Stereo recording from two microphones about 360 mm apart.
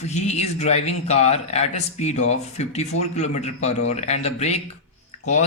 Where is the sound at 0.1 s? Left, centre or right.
Centre.